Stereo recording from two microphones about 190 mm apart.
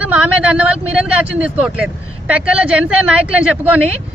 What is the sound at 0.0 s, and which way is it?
Speech, 5° right (ahead or behind).